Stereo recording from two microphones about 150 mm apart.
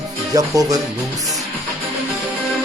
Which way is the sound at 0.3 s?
25° right (ahead or behind).